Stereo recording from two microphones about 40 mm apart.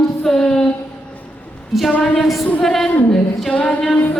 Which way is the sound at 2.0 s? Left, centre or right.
Centre.